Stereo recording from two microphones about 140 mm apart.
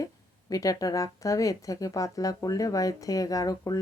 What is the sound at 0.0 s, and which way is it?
Speech, 25° left (ahead or behind).